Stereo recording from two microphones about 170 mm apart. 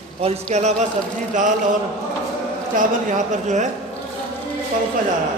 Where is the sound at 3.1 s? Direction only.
45° right (ahead or behind).